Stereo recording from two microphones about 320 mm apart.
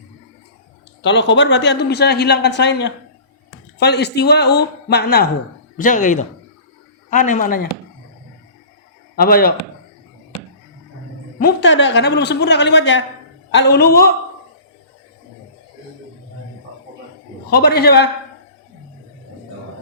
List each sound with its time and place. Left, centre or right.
1.0 s a man's voice: left
9.1 s a man's voice: left
11.3 s speech: left
17.5 s a man's voice: left